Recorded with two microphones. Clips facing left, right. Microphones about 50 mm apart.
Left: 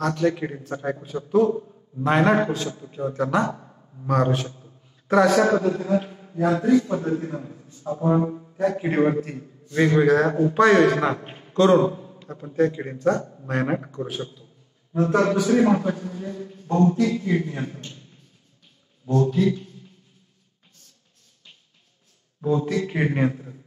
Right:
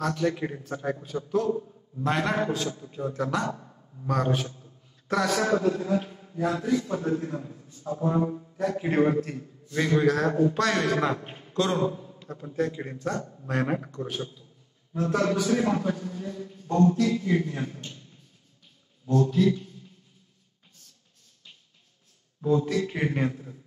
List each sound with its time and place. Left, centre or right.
0.0 s a man's voice: centre
0.3 s a man's voice: centre
1.5 s a man's voice: left
4.1 s a man's voice: centre
5.0 s a sound: centre
6.9 s a man's voice: left
19.1 s a man's voice: left
22.4 s a man's voice: left